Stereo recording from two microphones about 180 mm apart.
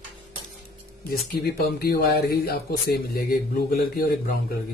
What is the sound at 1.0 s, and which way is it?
Speech, 60° left (ahead or behind).